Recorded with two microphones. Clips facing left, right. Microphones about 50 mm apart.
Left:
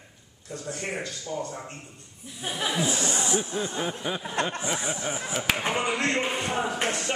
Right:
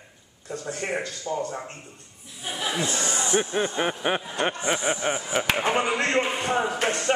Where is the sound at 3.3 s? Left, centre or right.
Right.